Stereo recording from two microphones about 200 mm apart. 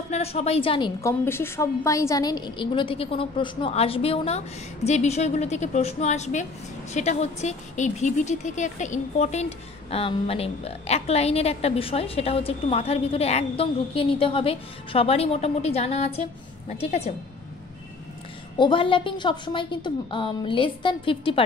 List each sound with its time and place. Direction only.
0.1 s a woman's voice: 30° left (ahead or behind)
1.2 s a woman's voice: 10° left (ahead or behind); by 16.2 s 30° left (ahead or behind)
18.6 s a woman's voice: 25° left (ahead or behind)